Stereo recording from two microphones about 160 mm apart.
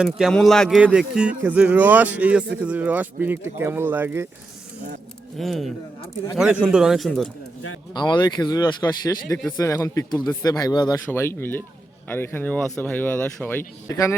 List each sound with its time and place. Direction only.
0.0 s speech: centre (ahead or behind)
5.4 s speech: centre (ahead or behind)
7.9 s speech: 25° left (ahead or behind)